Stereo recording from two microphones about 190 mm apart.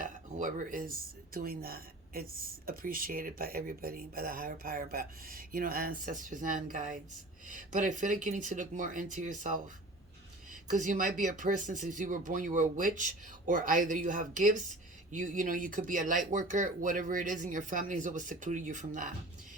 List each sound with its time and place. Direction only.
0.0 s dishes: 45° right (ahead or behind)
1.3 s a woman's voice: 50° right (ahead or behind)